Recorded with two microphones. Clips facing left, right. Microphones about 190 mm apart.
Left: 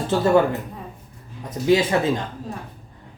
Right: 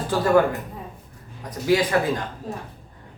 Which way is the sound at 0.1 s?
25° left (ahead or behind).